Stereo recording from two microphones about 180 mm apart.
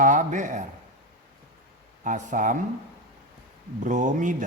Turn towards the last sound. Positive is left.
turn(degrees=-45)  # may be behind; listen again after turning